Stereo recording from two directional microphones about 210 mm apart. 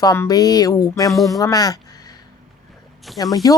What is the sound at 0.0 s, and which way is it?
Speech, 15° left (ahead or behind).